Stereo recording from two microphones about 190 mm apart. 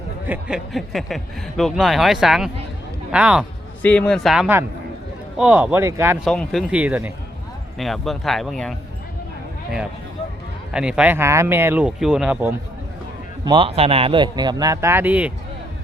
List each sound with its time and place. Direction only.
0.3 s speech: 5° right (ahead or behind)
3.8 s speech: 5° left (ahead or behind); by 6.1 s 10° right (ahead or behind)
6.2 s speech: 5° left (ahead or behind)
10.7 s speech: 5° right (ahead or behind)
13.4 s speech: 25° right (ahead or behind); by 15.3 s 10° right (ahead or behind)